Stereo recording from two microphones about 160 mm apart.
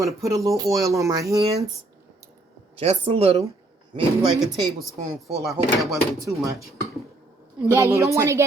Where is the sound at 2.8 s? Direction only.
35° right (ahead or behind).